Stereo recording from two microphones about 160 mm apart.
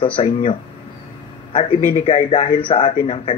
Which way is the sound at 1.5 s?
35° left (ahead or behind).